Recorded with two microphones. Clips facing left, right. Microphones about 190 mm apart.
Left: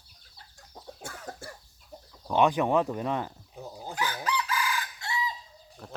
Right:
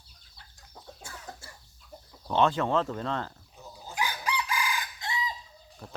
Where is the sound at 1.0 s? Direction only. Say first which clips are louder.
Left 6 dB; 55° left (ahead or behind).